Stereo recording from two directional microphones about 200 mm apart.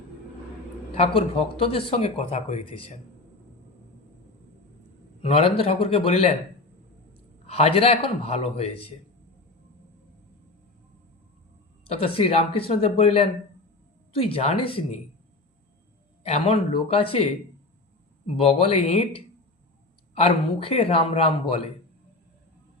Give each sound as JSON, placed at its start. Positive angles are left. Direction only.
{"t": 0.9, "sound": "speech", "side_deg": 30}
{"t": 5.2, "sound": "speech", "side_deg": 30}
{"t": 7.4, "sound": "speech", "side_deg": 30}
{"t": 11.9, "sound": "speech", "side_deg": 30}
{"t": 16.2, "sound": "speech", "side_deg": 30}
{"t": 18.3, "sound": "speech", "side_deg": 30}